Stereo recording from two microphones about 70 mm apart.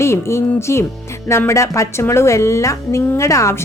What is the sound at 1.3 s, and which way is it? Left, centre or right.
Speech, left.